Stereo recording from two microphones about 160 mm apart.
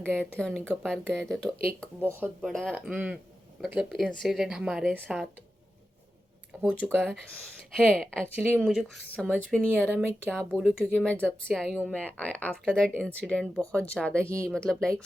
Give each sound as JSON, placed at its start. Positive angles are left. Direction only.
{"t": 0.0, "sound": "speech", "side_deg": 5}
{"t": 2.0, "sound": "speech", "side_deg": -15}
{"t": 2.4, "sound": "speech", "side_deg": 5}
{"t": 6.5, "sound": "speech", "side_deg": -10}
{"t": 9.9, "sound": "speech", "side_deg": -10}
{"t": 10.5, "sound": "speech", "side_deg": 0}
{"t": 14.3, "sound": "speech", "side_deg": -20}
{"t": 14.5, "sound": "speech", "side_deg": 5}